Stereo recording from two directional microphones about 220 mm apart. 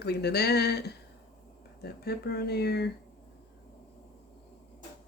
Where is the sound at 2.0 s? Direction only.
45° left (ahead or behind).